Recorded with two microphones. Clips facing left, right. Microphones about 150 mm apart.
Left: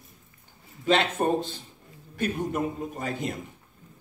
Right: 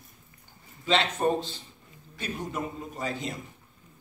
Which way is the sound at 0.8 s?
50° left (ahead or behind).